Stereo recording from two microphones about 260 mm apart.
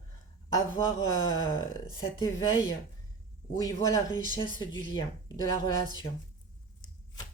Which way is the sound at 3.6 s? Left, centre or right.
Centre.